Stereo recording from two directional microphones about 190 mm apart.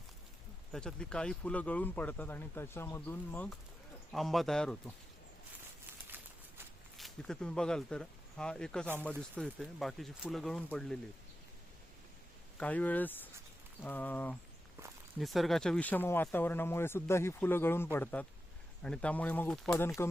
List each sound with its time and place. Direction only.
0.7 s speech: 5° left (ahead or behind)
6.9 s speech: centre (ahead or behind)
12.5 s speech: 10° left (ahead or behind)